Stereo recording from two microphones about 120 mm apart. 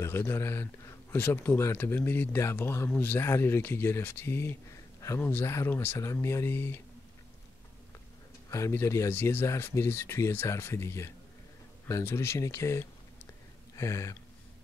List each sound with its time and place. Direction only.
0.0 s speech: 20° left (ahead or behind)
8.5 s speech: 25° left (ahead or behind)